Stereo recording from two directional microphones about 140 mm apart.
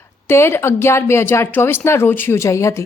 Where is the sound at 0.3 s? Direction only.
20° left (ahead or behind).